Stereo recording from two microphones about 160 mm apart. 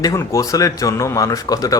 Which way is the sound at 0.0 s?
20° left (ahead or behind).